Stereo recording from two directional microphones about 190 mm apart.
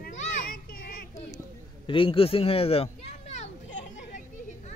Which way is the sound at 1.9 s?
30° left (ahead or behind).